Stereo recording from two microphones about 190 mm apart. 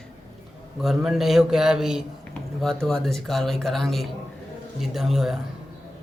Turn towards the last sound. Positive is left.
turn(degrees=0)  # may be behind; listen again after turning